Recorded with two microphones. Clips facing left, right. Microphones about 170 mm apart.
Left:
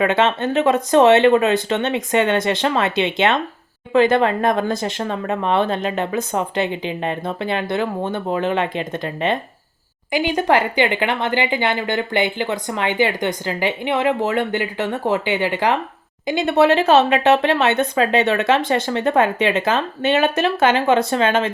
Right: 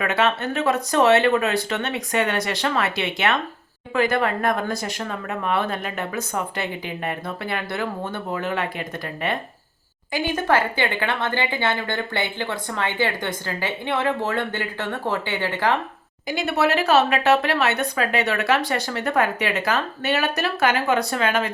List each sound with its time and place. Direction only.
0.0 s a woman's voice: 25° left (ahead or behind)